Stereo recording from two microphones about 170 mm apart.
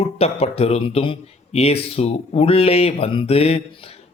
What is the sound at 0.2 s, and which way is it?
Speech, 35° left (ahead or behind).